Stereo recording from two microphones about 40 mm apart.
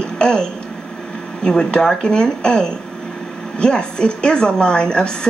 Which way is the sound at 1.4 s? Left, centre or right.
Centre.